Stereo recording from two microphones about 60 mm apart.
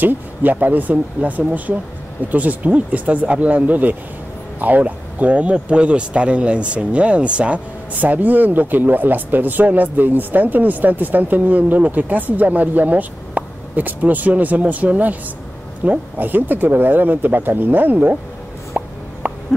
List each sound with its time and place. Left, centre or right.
0.0 s speech: right
18.8 s plop: right
19.2 s a sound: right